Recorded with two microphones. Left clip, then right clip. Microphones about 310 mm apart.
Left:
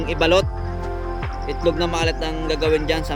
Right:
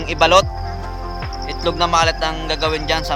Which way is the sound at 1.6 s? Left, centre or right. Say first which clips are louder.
Right 5 dB; centre.